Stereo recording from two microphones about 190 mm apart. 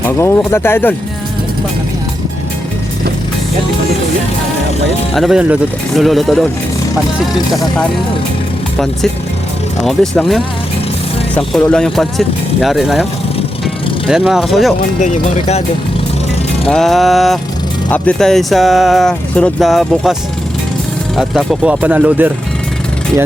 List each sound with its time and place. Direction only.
0.1 s speech: 10° left (ahead or behind)
5.1 s speech: centre (ahead or behind)
9.8 s speech: centre (ahead or behind)
11.7 s speech: centre (ahead or behind)
14.1 s speech: centre (ahead or behind)
15.0 s speech: 35° left (ahead or behind)
16.6 s speech: 5° left (ahead or behind)
21.2 s speech: centre (ahead or behind)